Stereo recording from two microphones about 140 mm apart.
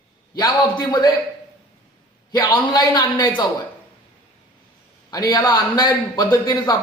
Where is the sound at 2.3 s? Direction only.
30° left (ahead or behind).